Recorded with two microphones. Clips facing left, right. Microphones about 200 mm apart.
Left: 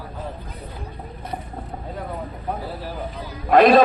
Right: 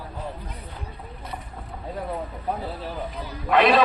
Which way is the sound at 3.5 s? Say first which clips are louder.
Left 5 dB; 45° left (ahead or behind).